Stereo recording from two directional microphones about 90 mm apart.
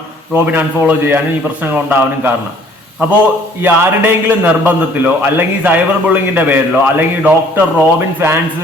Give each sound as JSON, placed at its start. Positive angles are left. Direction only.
{"t": 0.3, "sound": "a man's voice", "side_deg": -20}
{"t": 3.6, "sound": "a man's voice", "side_deg": -25}